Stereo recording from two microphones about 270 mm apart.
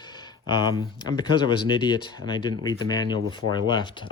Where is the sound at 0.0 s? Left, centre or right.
Centre.